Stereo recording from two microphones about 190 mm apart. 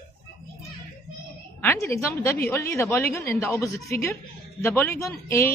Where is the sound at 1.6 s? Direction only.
15° left (ahead or behind).